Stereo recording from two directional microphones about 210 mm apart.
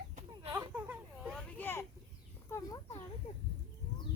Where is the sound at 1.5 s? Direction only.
10° left (ahead or behind).